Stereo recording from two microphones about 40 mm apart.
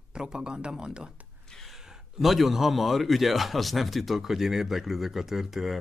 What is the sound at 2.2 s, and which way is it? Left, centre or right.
A man's voice, centre.